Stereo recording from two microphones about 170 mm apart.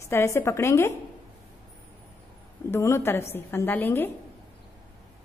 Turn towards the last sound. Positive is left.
turn(degrees=10)  # may be behind; listen again after turning